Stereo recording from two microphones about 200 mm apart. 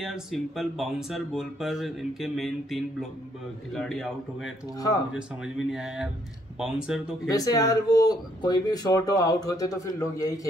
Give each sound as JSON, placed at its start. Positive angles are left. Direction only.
{"t": 0.0, "sound": "speech", "side_deg": 0}
{"t": 5.7, "sound": "speech", "side_deg": -5}
{"t": 7.2, "sound": "speech", "side_deg": 20}